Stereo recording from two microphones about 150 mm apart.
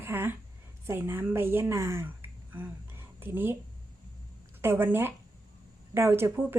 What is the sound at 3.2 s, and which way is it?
Speech, 15° right (ahead or behind).